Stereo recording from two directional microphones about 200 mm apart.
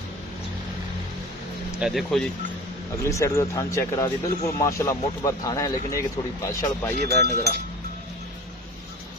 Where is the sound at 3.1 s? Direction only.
15° left (ahead or behind).